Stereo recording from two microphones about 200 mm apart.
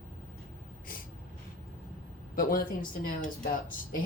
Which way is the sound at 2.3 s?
45° left (ahead or behind).